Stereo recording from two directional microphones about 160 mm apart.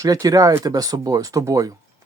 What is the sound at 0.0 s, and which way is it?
Speech, 20° right (ahead or behind).